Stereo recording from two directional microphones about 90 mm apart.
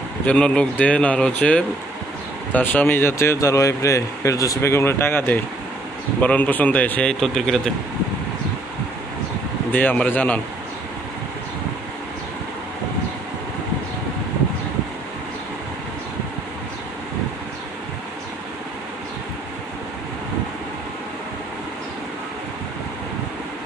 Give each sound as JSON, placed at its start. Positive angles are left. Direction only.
{"t": 0.2, "sound": "speech", "side_deg": 15}
{"t": 9.7, "sound": "speech", "side_deg": 20}